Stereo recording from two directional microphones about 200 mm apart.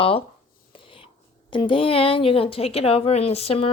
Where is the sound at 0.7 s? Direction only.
25° left (ahead or behind).